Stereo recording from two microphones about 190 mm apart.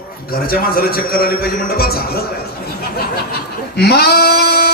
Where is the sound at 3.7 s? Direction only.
55° left (ahead or behind).